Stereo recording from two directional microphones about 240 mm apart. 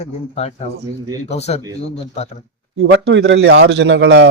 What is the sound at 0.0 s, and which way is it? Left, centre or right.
Speech, left.